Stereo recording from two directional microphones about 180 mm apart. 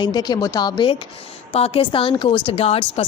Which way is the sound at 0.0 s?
20° left (ahead or behind).